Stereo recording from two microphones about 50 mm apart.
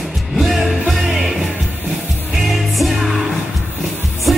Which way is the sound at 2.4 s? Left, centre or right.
Centre.